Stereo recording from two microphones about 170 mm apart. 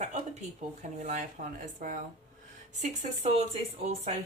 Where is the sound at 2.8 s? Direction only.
45° right (ahead or behind).